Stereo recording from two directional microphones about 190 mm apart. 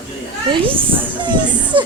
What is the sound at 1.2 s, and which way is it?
Speech, 25° right (ahead or behind).